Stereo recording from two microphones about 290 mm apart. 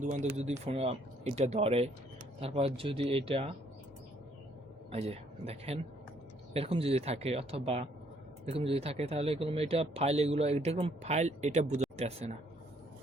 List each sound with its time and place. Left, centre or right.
0.0 s speech: right
4.9 s a man's voice: right